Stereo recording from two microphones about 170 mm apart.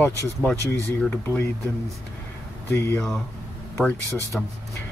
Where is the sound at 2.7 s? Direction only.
15° left (ahead or behind).